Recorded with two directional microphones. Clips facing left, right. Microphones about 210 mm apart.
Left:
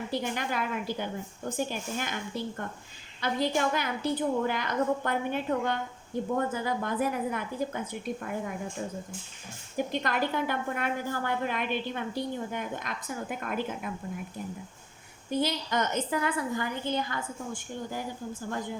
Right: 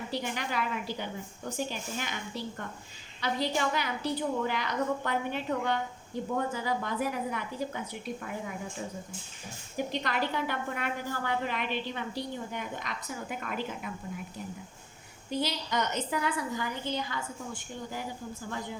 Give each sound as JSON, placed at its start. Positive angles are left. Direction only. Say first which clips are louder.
{"t": 0.1, "sound": "a woman's voice", "louder": "left 2 dB", "side_deg": 50}
{"t": 9.7, "sound": "a woman's voice", "louder": "left 2 dB", "side_deg": 50}
{"t": 15.3, "sound": "a woman's voice", "louder": "left 3 dB", "side_deg": 50}